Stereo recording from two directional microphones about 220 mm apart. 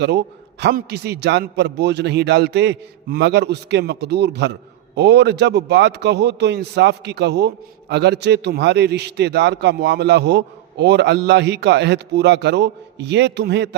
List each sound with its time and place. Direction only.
0.0 s a man's voice: 50° right (ahead or behind)